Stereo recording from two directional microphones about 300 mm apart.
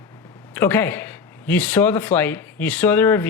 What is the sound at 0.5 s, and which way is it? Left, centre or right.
Speech, centre.